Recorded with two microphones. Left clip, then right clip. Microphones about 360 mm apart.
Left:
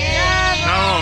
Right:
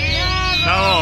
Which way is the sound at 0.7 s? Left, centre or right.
Centre.